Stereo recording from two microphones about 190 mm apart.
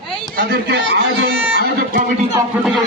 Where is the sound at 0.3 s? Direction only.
55° right (ahead or behind).